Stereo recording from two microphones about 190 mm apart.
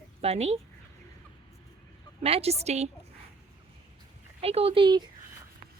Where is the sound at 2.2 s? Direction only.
30° right (ahead or behind).